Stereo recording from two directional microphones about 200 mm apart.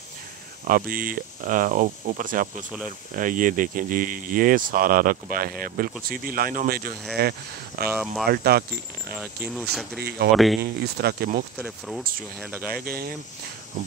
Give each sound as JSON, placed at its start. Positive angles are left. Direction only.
{"t": 0.7, "sound": "speech", "side_deg": -45}
{"t": 7.9, "sound": "speech", "side_deg": 0}
{"t": 8.3, "sound": "speech", "side_deg": -50}
{"t": 9.1, "sound": "speech", "side_deg": -5}
{"t": 9.9, "sound": "speech", "side_deg": -55}
{"t": 10.3, "sound": "speech", "side_deg": 0}
{"t": 10.6, "sound": "speech", "side_deg": -50}
{"t": 11.5, "sound": "speech", "side_deg": 0}
{"t": 12.7, "sound": "speech", "side_deg": -50}